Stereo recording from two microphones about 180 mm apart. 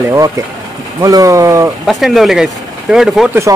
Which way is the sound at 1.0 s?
20° right (ahead or behind).